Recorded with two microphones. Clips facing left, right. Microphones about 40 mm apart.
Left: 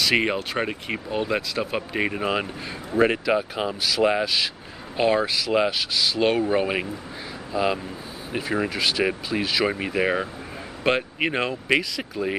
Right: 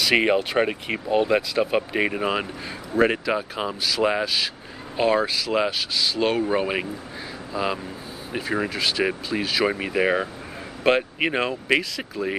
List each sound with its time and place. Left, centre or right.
0.0 s speech: centre